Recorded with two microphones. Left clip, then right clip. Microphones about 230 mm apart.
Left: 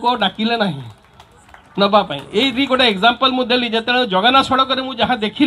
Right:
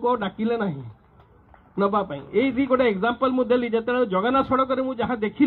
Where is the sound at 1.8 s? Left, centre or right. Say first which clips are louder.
Left 9 dB; left.